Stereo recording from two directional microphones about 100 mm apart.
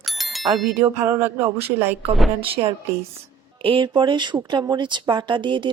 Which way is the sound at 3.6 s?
60° right (ahead or behind).